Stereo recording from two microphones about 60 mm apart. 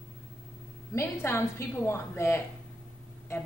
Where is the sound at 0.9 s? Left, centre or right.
Left.